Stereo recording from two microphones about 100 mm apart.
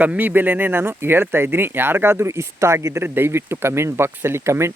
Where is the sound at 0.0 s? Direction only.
15° right (ahead or behind).